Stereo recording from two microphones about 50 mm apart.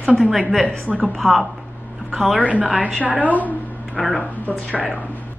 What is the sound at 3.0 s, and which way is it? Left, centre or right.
Speech, right.